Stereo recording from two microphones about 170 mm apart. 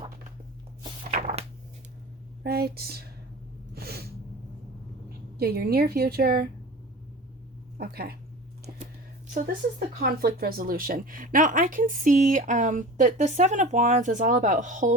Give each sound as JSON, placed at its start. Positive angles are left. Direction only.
{"t": 1.1, "sound": "a sound", "side_deg": -50}
{"t": 2.4, "sound": "speech", "side_deg": -65}
{"t": 3.8, "sound": "snort", "side_deg": -65}
{"t": 5.4, "sound": "a woman's voice", "side_deg": -65}
{"t": 7.8, "sound": "a woman's voice", "side_deg": -65}
{"t": 10.0, "sound": "a woman's voice", "side_deg": -60}